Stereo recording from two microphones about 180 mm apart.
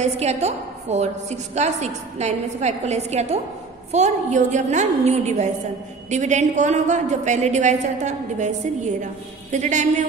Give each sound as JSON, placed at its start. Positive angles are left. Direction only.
{"t": 0.0, "sound": "a woman's voice", "side_deg": -35}